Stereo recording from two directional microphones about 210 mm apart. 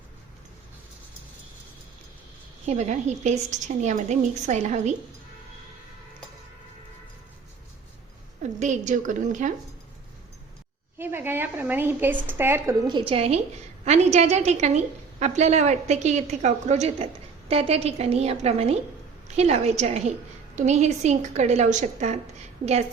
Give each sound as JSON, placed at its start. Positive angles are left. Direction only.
{"t": 2.6, "sound": "a woman's voice", "side_deg": -35}
{"t": 8.5, "sound": "a woman's voice", "side_deg": -35}
{"t": 10.9, "sound": "a woman's voice", "side_deg": -10}
{"t": 12.9, "sound": "a woman's voice", "side_deg": -25}